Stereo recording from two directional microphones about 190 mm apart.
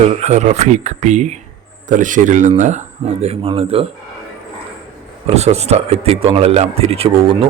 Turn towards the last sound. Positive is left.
turn(degrees=-25)  # may be behind; listen again after turning